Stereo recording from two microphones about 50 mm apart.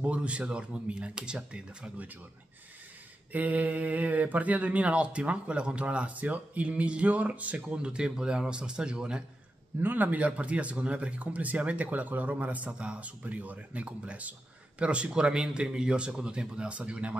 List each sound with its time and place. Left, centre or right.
0.0 s speech: right
3.3 s speech: right
7.8 s a man's voice: centre
9.8 s speech: right